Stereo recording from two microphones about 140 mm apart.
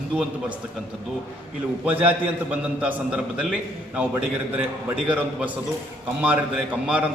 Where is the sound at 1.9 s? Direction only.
10° right (ahead or behind).